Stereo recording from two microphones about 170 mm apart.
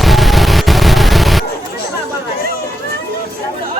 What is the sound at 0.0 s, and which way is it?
Music, centre (ahead or behind).